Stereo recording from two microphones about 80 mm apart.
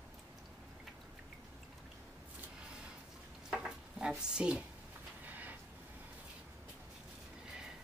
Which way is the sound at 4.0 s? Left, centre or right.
Centre.